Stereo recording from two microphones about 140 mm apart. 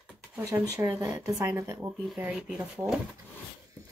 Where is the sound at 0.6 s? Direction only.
15° right (ahead or behind).